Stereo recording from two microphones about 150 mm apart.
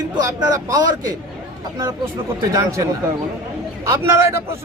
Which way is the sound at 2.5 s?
20° right (ahead or behind).